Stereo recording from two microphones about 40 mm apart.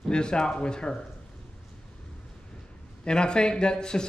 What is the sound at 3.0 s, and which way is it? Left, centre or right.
A man's voice, left.